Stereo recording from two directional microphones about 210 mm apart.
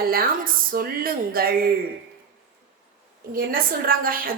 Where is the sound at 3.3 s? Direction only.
45° right (ahead or behind).